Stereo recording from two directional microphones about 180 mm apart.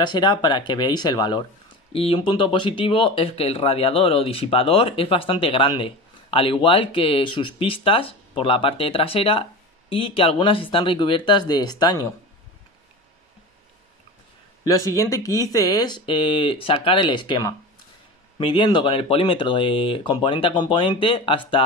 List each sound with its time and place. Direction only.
0.0 s speech: 25° left (ahead or behind)
14.6 s speech: 20° left (ahead or behind)